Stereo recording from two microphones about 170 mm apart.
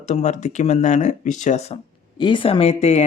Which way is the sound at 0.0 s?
40° left (ahead or behind).